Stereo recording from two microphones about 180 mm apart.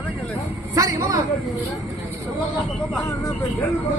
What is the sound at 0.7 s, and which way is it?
Speech, 20° right (ahead or behind).